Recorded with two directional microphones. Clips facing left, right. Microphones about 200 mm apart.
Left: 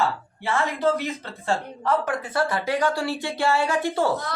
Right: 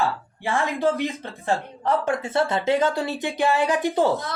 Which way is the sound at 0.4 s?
15° right (ahead or behind).